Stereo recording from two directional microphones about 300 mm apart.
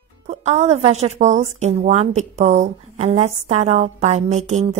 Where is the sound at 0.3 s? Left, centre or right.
Right.